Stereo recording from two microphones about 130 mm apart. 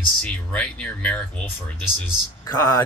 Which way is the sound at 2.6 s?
25° left (ahead or behind).